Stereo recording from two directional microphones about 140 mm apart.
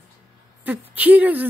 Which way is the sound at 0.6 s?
10° right (ahead or behind).